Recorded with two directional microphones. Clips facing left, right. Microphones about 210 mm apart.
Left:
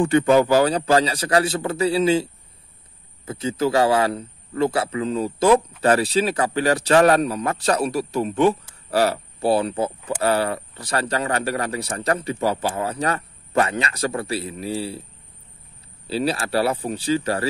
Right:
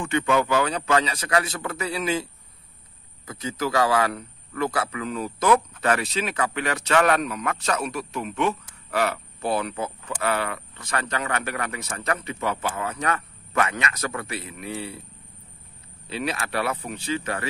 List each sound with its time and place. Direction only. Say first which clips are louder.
0.0 s speech: left 7 dB; 35° left (ahead or behind)
3.3 s a man's voice: left 6 dB; 30° left (ahead or behind)
16.1 s speech: left 6 dB; 35° left (ahead or behind)